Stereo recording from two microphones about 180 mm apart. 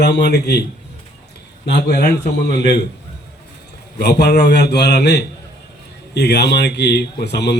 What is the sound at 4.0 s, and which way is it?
A man's voice, 65° left (ahead or behind).